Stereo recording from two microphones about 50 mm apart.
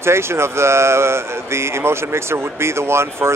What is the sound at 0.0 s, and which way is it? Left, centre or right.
Speech, right.